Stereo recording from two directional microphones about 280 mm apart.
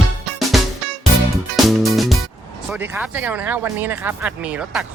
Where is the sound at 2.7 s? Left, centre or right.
Centre.